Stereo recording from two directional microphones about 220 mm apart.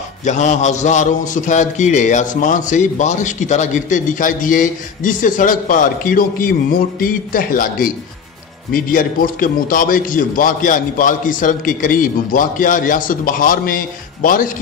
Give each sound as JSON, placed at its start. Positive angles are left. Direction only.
{"t": 0.2, "sound": "a man's voice", "side_deg": 30}